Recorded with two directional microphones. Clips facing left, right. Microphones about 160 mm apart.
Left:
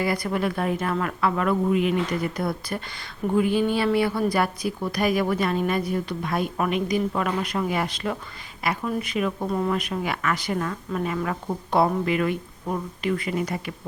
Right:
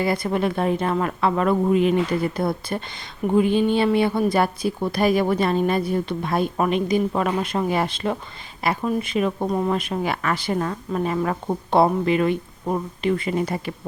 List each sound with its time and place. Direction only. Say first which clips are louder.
0.0 s a woman's voice: right 3 dB; 25° right (ahead or behind)